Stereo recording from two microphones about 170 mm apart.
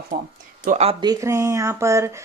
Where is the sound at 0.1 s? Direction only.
65° right (ahead or behind).